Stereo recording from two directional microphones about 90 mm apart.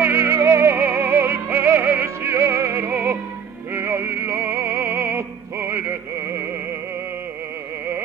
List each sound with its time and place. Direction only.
0.0 s music: 25° right (ahead or behind)